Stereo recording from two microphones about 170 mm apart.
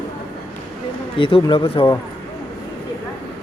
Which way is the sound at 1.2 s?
30° left (ahead or behind).